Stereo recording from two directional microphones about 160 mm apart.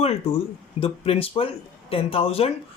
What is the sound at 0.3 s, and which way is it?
Speech, 35° left (ahead or behind).